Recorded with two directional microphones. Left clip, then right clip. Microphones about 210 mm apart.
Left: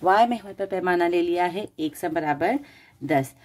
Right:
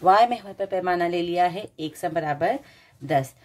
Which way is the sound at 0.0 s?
30° left (ahead or behind).